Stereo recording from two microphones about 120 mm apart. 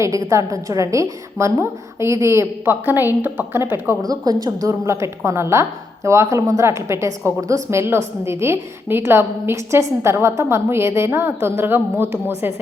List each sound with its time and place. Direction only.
0.0 s a woman's voice: 25° right (ahead or behind)
4.1 s a woman's voice: 30° right (ahead or behind)